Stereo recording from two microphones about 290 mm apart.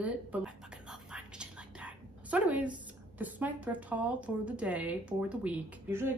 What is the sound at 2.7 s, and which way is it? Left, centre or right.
A woman's voice, centre.